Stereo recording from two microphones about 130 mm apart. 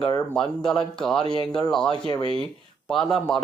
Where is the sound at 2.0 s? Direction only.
40° left (ahead or behind).